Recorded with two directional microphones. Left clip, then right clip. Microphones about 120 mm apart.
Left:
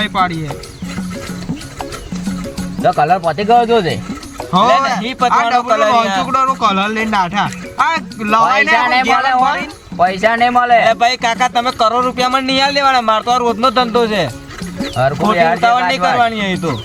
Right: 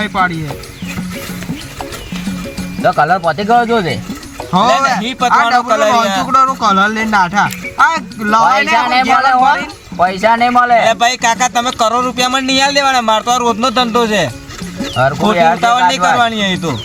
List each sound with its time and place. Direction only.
0.0 s speech: 5° left (ahead or behind)
2.8 s speech: 35° left (ahead or behind)
3.5 s speech: 20° left (ahead or behind)
4.5 s speech: centre (ahead or behind)
5.3 s speech: 15° left (ahead or behind)
5.6 s speech: 15° right (ahead or behind)
6.3 s speech: 10° left (ahead or behind)
10.8 s speech: 15° right (ahead or behind)
14.9 s speech: 25° left (ahead or behind)
15.6 s speech: 15° right (ahead or behind)